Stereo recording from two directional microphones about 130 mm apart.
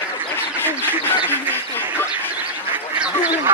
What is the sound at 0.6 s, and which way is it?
Duck, 15° left (ahead or behind).